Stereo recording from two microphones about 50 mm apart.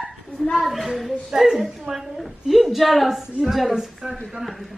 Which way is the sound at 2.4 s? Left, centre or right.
Centre.